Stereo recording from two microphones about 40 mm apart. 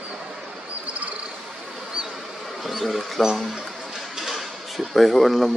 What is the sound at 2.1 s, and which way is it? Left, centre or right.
Bee, centre.